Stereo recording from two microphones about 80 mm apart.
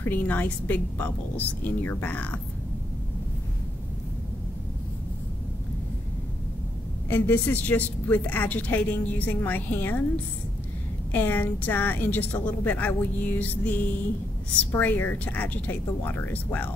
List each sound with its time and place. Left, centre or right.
0.0 s a woman's voice: left
7.1 s a woman's voice: left
11.1 s a woman's voice: left